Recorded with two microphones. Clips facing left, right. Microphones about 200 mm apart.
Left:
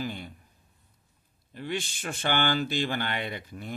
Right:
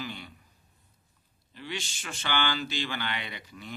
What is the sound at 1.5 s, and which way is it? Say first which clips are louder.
Speech: left 5 dB; 50° left (ahead or behind).